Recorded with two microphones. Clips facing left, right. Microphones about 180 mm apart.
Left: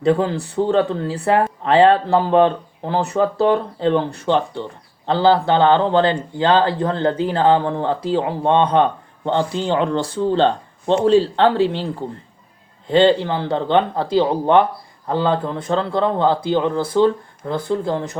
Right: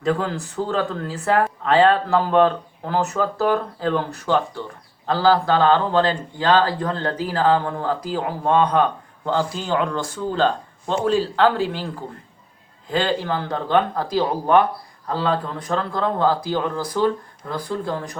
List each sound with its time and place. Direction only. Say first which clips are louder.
0.0 s speech: left 5 dB; 30° left (ahead or behind)
12.9 s speech: left 7 dB; 25° left (ahead or behind)